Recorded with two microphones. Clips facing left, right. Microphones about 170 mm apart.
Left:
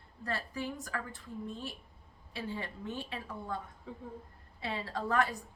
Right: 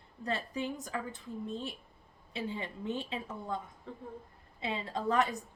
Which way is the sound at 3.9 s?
5° left (ahead or behind).